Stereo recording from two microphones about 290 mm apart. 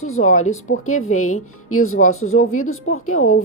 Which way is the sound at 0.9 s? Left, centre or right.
Left.